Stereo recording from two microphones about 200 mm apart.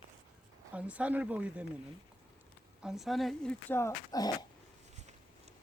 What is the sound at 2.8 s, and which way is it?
Speech, centre (ahead or behind).